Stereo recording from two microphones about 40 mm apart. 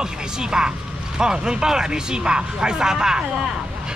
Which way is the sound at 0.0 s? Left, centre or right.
Centre.